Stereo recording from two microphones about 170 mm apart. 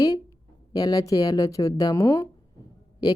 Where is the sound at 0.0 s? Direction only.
20° left (ahead or behind).